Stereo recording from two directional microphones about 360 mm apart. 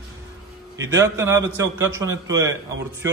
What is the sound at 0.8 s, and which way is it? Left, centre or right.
A man's voice, centre.